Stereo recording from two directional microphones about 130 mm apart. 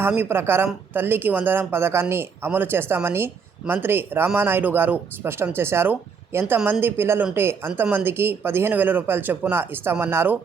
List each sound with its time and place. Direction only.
0.2 s speech: 15° right (ahead or behind)